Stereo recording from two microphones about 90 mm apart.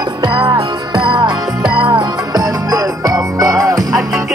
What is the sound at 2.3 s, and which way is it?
Music, 45° right (ahead or behind).